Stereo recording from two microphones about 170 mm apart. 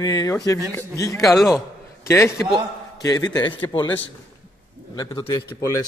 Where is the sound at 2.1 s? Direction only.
15° left (ahead or behind).